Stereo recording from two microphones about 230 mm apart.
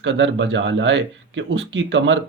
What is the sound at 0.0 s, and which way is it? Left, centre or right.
Speech, right.